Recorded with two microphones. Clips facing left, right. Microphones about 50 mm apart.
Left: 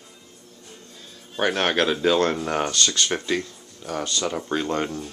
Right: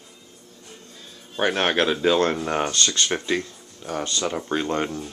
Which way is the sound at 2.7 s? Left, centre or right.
Right.